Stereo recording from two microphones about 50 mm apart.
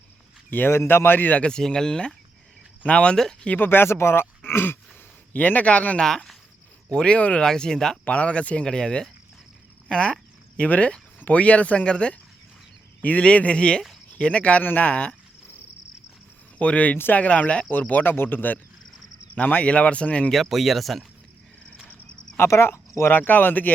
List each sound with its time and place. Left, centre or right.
0.7 s speech: left
1.4 s speech: centre
3.6 s speech: left
5.3 s speech: left
6.0 s speech: centre
7.4 s speech: centre
8.0 s speech: left
14.6 s speech: left
16.6 s speech: left
19.4 s speech: left
20.3 s speech: centre
22.4 s speech: left
23.1 s speech: left